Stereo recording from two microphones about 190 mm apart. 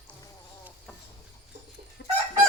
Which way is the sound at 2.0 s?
60° left (ahead or behind).